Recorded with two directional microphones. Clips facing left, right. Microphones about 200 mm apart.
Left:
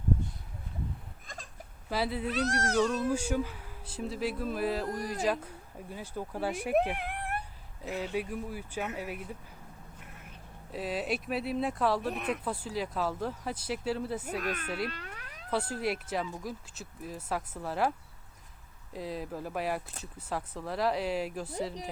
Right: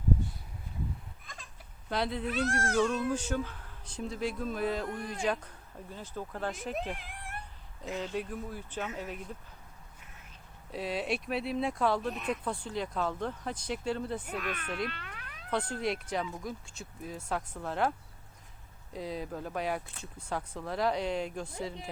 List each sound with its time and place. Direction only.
1.9 s speech: 5° left (ahead or behind)
2.3 s cat: 40° left (ahead or behind)
3.1 s speech: 10° left (ahead or behind)
6.9 s cat: 60° left (ahead or behind)
7.8 s speech: 5° left (ahead or behind)
10.7 s speech: centre (ahead or behind)
14.3 s cat: 40° left (ahead or behind)
14.8 s a sound: 40° left (ahead or behind)
15.4 s speech: 5° left (ahead or behind)
18.9 s speech: centre (ahead or behind)